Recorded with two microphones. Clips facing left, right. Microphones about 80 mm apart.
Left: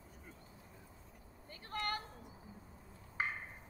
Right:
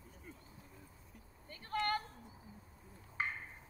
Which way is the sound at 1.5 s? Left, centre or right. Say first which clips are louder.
Right 4 dB; centre.